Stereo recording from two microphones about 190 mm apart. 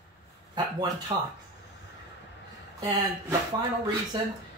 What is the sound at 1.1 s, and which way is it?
Speech, 25° right (ahead or behind).